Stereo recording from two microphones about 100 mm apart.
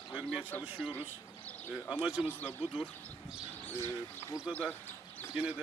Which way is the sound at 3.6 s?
25° left (ahead or behind).